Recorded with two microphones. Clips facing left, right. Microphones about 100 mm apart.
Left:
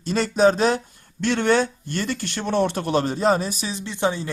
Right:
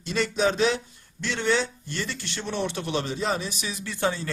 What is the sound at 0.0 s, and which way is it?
Speech, 40° left (ahead or behind).